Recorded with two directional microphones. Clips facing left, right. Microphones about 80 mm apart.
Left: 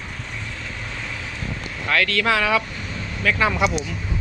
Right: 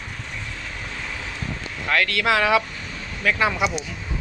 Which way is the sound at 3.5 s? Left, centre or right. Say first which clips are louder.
Left 2 dB; centre.